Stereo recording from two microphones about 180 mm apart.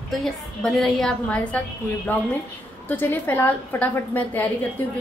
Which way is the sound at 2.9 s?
10° left (ahead or behind).